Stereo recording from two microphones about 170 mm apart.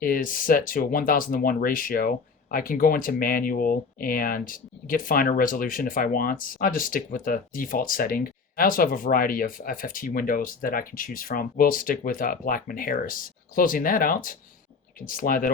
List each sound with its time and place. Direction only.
0.0 s speech: 55° left (ahead or behind)